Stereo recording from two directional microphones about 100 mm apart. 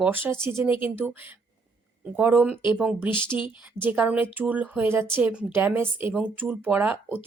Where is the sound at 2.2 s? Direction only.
15° right (ahead or behind).